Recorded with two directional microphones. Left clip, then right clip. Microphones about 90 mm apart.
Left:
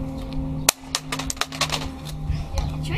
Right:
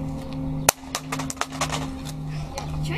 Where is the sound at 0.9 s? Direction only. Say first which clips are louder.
Left 2 dB; 15° left (ahead or behind).